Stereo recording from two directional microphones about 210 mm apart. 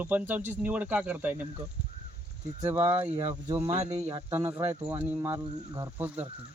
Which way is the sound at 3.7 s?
30° right (ahead or behind).